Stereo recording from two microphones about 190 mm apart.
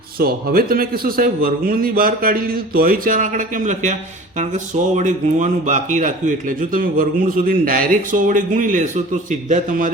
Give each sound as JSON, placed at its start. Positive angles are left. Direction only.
{"t": 0.2, "sound": "speech", "side_deg": -50}